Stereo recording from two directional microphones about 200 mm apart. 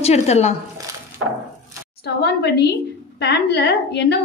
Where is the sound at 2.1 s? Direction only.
55° left (ahead or behind).